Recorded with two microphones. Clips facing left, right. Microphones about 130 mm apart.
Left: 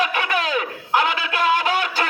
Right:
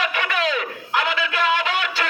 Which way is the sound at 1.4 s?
40° left (ahead or behind).